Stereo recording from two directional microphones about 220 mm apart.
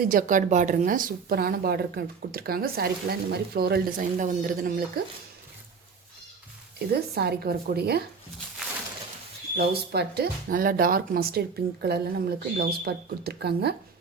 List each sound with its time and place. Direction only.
0.1 s speech: 35° right (ahead or behind)
6.9 s speech: 45° right (ahead or behind)
9.6 s speech: 45° right (ahead or behind)